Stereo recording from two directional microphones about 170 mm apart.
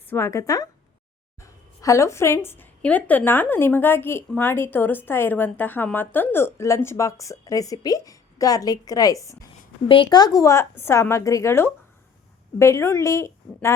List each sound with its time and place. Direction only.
0.1 s a woman's voice: 15° left (ahead or behind)